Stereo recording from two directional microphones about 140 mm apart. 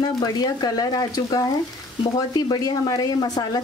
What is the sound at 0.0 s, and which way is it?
Speech, 30° left (ahead or behind).